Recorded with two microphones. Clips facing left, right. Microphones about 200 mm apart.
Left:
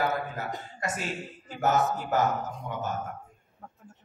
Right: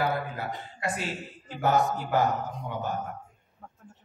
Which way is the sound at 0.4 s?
45° left (ahead or behind).